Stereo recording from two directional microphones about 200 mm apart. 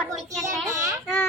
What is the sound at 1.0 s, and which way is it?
Child singing, 10° left (ahead or behind).